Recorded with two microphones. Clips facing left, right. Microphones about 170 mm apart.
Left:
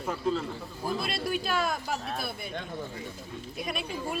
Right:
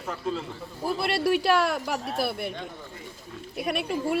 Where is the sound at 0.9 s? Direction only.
70° right (ahead or behind).